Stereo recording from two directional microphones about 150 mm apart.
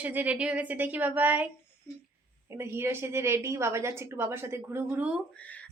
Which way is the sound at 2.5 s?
15° right (ahead or behind).